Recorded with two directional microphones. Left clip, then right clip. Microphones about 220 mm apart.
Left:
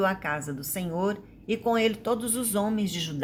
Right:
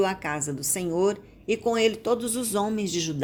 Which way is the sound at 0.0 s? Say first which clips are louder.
Right 1 dB; 35° right (ahead or behind).